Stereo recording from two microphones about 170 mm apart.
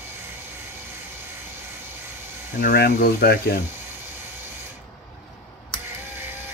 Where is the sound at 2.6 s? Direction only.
55° left (ahead or behind).